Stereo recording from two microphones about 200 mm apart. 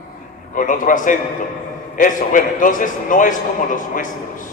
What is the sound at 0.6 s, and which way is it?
A man's voice, 40° left (ahead or behind).